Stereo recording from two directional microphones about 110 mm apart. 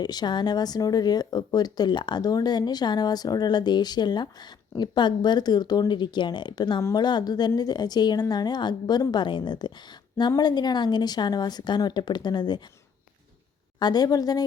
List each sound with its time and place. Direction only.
0.0 s a woman's voice: 40° left (ahead or behind)
13.7 s a woman's voice: 40° left (ahead or behind)